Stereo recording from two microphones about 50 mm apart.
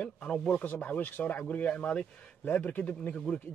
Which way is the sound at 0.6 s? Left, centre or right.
Left.